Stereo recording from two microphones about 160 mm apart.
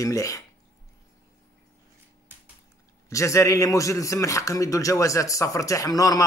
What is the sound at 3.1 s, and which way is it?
A man's voice, 20° left (ahead or behind).